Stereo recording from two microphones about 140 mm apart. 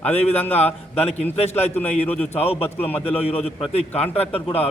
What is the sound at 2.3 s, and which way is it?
A man's voice, 45° left (ahead or behind).